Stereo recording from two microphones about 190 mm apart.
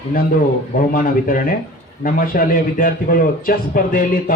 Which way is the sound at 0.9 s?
45° left (ahead or behind).